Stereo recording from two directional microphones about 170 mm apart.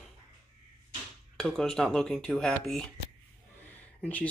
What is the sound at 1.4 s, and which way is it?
Speech, centre (ahead or behind).